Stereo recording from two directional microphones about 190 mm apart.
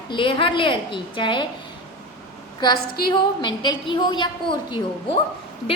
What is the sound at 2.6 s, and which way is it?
A woman's voice, 20° left (ahead or behind).